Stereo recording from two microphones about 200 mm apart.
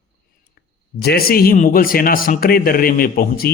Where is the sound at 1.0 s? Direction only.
50° left (ahead or behind).